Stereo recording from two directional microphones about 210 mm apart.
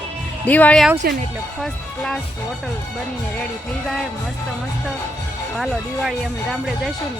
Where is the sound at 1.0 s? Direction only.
45° right (ahead or behind).